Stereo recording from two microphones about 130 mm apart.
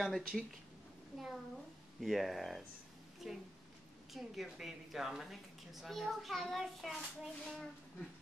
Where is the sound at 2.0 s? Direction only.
Centre (ahead or behind).